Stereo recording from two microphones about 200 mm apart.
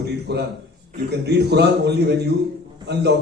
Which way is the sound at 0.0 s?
55° right (ahead or behind).